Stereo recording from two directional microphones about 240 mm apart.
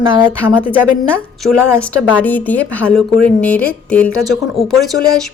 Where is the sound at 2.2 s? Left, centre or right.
Centre.